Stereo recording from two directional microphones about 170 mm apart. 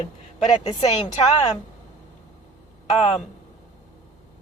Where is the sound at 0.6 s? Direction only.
40° left (ahead or behind).